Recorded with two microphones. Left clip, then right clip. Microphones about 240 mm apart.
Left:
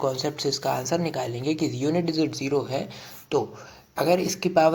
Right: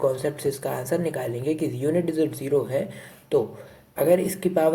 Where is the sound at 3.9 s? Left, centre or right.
Left.